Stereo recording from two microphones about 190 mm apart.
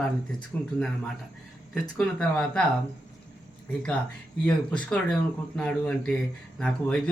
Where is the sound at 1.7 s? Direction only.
5° left (ahead or behind).